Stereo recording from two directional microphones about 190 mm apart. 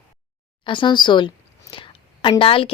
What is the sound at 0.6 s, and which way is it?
A woman's voice, 25° left (ahead or behind).